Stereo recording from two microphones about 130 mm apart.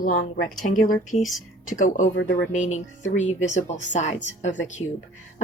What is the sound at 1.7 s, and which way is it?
Speech, 75° left (ahead or behind).